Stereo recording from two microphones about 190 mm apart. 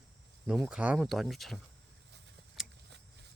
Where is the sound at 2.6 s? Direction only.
Centre (ahead or behind).